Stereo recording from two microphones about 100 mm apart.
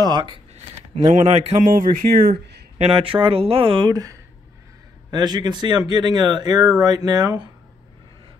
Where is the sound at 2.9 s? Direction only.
65° right (ahead or behind); by 7.3 s 40° right (ahead or behind).